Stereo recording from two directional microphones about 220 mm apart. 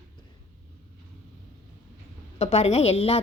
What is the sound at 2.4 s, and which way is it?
Speech, 30° left (ahead or behind).